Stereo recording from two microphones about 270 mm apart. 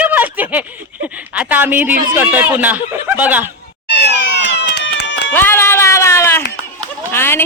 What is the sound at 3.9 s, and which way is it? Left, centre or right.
Cat, left.